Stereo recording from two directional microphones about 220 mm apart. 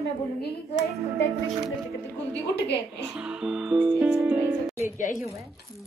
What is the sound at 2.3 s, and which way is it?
Speech, 50° left (ahead or behind).